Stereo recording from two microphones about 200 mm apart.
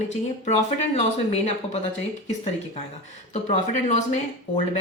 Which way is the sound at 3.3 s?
35° left (ahead or behind).